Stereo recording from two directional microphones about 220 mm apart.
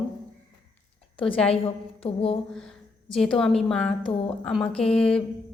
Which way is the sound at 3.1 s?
Centre (ahead or behind).